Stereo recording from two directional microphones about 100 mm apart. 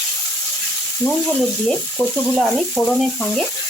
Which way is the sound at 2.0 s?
20° left (ahead or behind).